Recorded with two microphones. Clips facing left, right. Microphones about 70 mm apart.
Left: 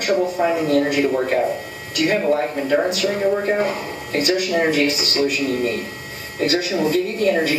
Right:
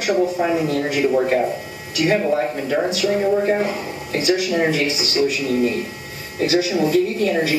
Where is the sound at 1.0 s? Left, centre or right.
Centre.